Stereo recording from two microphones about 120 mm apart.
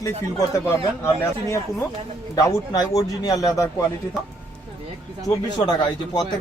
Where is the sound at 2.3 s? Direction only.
30° left (ahead or behind).